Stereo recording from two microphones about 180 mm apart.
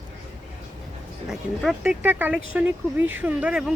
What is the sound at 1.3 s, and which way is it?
Speech, centre (ahead or behind).